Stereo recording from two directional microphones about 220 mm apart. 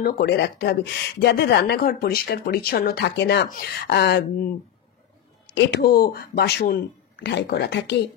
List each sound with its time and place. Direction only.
0.0 s speech: 45° left (ahead or behind)
5.5 s speech: 50° left (ahead or behind)